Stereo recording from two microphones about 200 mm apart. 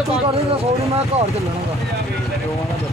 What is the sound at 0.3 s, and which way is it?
Speech, 30° right (ahead or behind).